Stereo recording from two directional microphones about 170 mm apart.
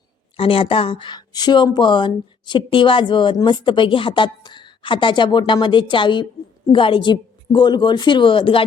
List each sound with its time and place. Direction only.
0.3 s speech: 30° left (ahead or behind)